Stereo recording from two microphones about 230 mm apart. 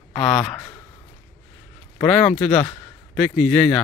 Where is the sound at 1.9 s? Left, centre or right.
Centre.